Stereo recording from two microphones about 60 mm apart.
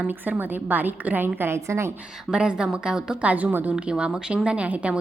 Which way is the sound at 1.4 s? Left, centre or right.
Right.